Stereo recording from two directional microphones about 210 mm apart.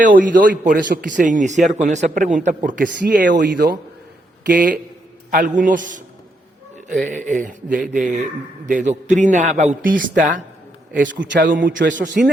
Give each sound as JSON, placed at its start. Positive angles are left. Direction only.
{"t": 0.0, "sound": "a man's voice", "side_deg": -40}
{"t": 3.3, "sound": "a man's voice", "side_deg": -55}
{"t": 4.4, "sound": "a man's voice", "side_deg": -40}
{"t": 11.0, "sound": "a man's voice", "side_deg": -60}
{"t": 11.4, "sound": "a man's voice", "side_deg": -40}